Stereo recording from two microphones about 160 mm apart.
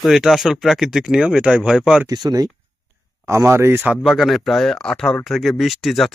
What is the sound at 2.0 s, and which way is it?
Speech, 25° right (ahead or behind).